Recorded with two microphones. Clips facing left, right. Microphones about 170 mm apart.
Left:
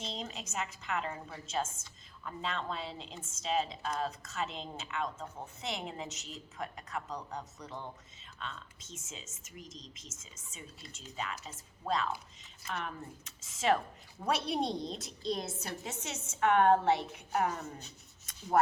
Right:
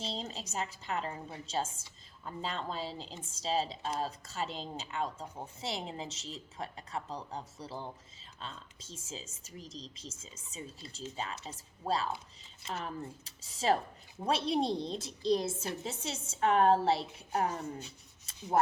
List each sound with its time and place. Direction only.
0.0 s a woman's voice: 30° right (ahead or behind)